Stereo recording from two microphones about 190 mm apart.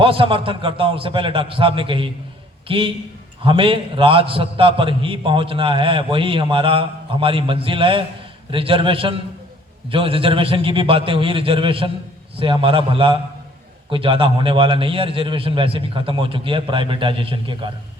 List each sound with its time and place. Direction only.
0.0 s a man's voice: 30° right (ahead or behind)